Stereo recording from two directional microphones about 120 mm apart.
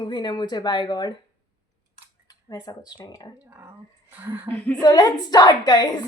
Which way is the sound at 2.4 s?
35° left (ahead or behind).